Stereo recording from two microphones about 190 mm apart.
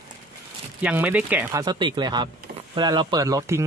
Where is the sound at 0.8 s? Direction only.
5° right (ahead or behind).